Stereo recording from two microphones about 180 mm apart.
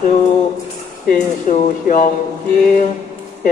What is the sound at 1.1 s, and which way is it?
Speech, 45° left (ahead or behind).